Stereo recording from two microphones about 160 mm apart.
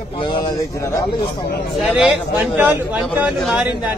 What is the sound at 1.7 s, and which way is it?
Speech, centre (ahead or behind).